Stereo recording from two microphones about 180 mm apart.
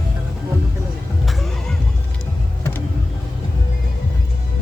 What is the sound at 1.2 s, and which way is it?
Neigh, centre (ahead or behind).